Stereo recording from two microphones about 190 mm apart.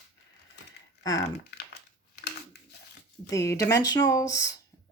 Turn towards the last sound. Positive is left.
turn(degrees=15)  # may be behind; listen again after turning